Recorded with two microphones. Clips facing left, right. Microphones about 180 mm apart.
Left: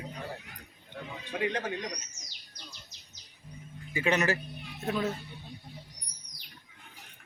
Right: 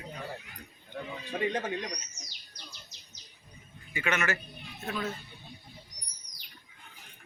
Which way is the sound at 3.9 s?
35° left (ahead or behind).